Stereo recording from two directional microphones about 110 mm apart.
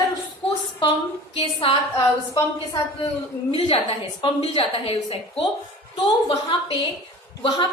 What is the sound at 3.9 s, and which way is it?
A woman's voice, 55° left (ahead or behind).